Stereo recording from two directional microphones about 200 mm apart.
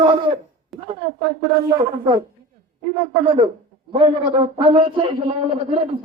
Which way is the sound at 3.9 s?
25° right (ahead or behind).